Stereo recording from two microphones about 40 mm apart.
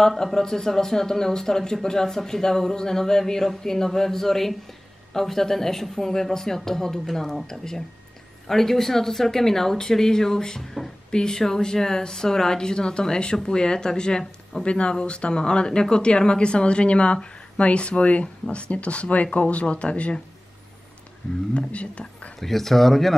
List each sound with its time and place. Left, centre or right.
0.0 s speech: centre
11.1 s speech: centre
21.5 s speech: left
22.4 s speech: centre